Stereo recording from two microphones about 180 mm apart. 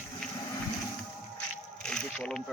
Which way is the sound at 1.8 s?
5° left (ahead or behind).